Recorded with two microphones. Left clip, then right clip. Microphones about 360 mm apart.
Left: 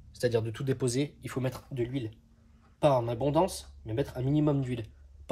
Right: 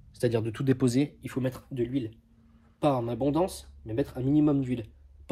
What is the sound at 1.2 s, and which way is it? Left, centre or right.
Speech, centre.